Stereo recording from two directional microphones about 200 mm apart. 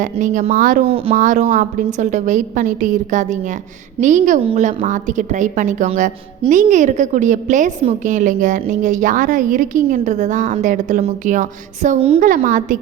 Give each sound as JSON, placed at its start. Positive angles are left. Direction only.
{"t": 0.0, "sound": "a woman's voice", "side_deg": -40}
{"t": 0.9, "sound": "speech", "side_deg": -30}
{"t": 1.1, "sound": "a woman's voice", "side_deg": -40}